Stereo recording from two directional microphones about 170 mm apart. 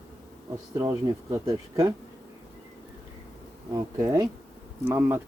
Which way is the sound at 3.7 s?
20° right (ahead or behind).